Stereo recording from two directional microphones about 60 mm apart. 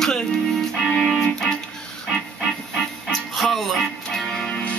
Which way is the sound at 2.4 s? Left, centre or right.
Centre.